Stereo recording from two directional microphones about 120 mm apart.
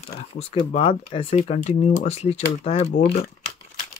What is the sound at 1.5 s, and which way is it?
Speech, 65° left (ahead or behind).